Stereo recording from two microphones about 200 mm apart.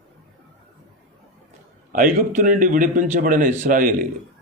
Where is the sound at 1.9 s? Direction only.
45° right (ahead or behind).